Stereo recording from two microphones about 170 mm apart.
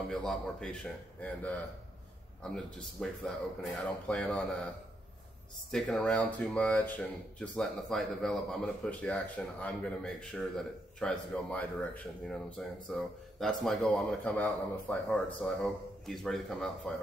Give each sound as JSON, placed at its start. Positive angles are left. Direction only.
{"t": 0.1, "sound": "speech", "side_deg": 5}
{"t": 5.7, "sound": "speech", "side_deg": 5}